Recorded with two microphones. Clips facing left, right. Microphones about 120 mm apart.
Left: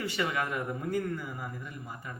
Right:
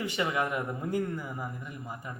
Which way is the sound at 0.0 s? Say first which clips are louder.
Right 2 dB; 20° right (ahead or behind).